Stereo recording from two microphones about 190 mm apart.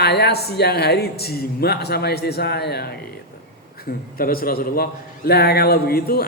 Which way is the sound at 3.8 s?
50° left (ahead or behind).